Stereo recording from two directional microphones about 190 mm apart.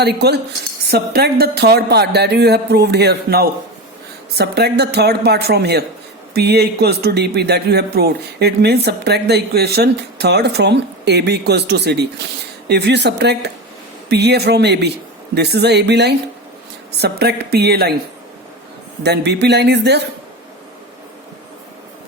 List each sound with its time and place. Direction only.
0.0 s speech: 60° right (ahead or behind)
19.0 s speech: 60° right (ahead or behind)